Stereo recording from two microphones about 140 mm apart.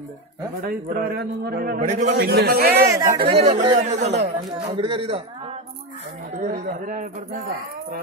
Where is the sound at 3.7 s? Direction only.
55° right (ahead or behind).